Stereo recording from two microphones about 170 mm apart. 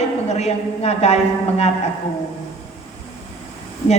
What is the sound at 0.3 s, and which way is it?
A woman's voice, 40° left (ahead or behind).